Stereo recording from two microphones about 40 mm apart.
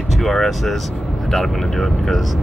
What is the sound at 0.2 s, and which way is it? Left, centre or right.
Speech, centre.